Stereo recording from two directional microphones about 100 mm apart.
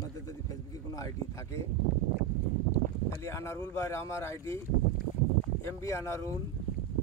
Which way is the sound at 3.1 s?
30° left (ahead or behind).